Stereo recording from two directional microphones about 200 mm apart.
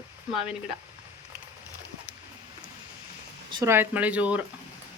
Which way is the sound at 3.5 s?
20° right (ahead or behind).